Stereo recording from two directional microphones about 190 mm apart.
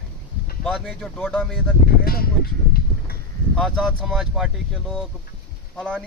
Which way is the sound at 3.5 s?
Centre (ahead or behind).